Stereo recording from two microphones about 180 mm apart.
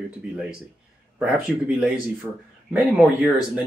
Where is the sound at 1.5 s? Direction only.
Centre (ahead or behind).